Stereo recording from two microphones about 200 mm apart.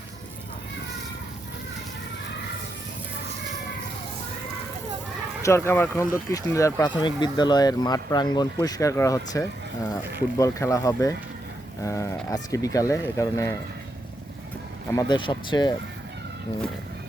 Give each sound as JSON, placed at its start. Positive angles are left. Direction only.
{"t": 5.4, "sound": "speech", "side_deg": 15}
{"t": 14.9, "sound": "speech", "side_deg": 20}